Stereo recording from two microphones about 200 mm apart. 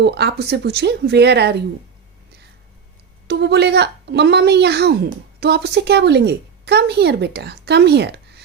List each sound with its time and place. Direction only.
0.0 s a woman's voice: 55° right (ahead or behind)
3.2 s a woman's voice: 55° right (ahead or behind)